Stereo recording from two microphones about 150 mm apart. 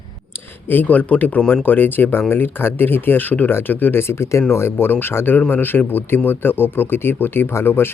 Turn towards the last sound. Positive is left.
turn(degrees=15)  # may be behind; listen again after turning